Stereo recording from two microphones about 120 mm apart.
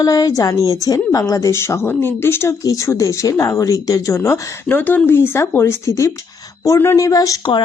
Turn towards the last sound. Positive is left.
turn(degrees=35)  # may be behind; listen again after turning